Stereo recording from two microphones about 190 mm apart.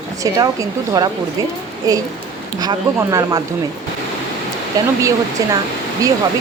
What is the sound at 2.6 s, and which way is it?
Speech, 20° right (ahead or behind).